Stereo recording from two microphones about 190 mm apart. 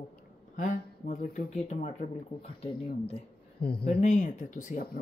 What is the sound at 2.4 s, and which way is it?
Speech, 30° left (ahead or behind).